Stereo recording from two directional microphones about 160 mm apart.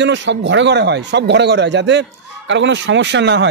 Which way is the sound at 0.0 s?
90° right.